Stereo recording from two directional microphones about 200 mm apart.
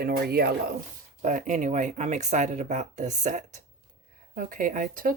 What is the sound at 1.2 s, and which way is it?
Speech, 40° right (ahead or behind).